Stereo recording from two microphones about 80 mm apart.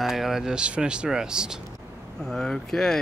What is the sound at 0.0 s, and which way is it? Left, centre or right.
Speech, centre.